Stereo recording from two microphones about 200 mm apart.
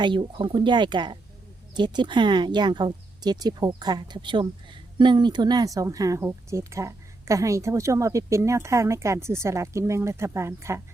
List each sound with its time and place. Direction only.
0.0 s speech: 25° right (ahead or behind)